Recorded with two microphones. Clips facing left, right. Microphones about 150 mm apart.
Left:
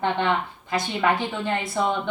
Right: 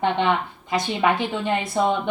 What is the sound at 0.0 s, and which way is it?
Speech, 15° right (ahead or behind).